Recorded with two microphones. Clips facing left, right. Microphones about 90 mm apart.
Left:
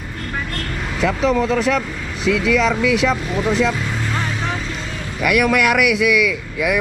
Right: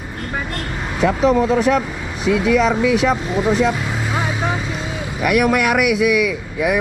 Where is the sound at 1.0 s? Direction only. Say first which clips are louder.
Right 3 dB; 15° right (ahead or behind).